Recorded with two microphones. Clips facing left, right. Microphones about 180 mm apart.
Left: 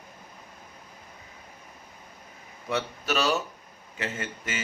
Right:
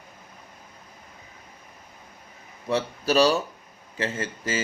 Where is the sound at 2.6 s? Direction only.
35° right (ahead or behind).